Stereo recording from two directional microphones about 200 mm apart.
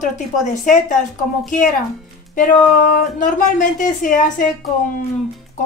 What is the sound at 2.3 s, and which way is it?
A woman's voice, 40° left (ahead or behind).